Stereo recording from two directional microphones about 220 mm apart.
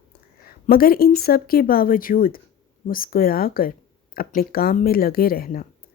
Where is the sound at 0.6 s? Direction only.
40° left (ahead or behind).